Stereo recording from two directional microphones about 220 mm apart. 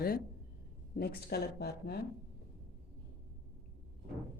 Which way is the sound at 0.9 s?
45° left (ahead or behind).